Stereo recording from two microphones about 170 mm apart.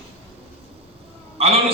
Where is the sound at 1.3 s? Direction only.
35° right (ahead or behind).